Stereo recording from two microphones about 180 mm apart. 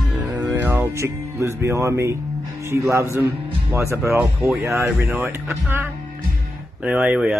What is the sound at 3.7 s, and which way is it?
Speech, 15° right (ahead or behind).